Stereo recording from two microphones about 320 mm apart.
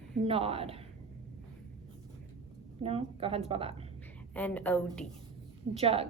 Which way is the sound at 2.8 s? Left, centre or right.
Centre.